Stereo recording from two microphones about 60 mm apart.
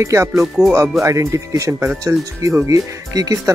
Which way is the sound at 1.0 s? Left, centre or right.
Right.